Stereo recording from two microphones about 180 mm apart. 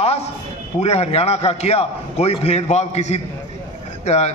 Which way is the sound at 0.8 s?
35° left (ahead or behind).